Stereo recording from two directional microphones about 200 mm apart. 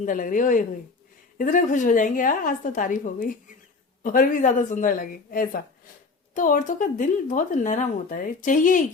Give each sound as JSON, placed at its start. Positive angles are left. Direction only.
{"t": 0.0, "sound": "a woman's voice", "side_deg": 40}